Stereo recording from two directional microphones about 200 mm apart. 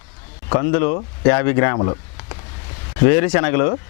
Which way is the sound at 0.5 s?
20° left (ahead or behind).